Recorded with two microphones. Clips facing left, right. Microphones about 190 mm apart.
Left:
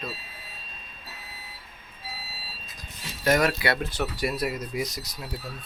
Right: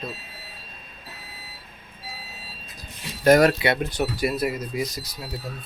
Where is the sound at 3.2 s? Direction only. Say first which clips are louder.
Right 7 dB; 40° right (ahead or behind).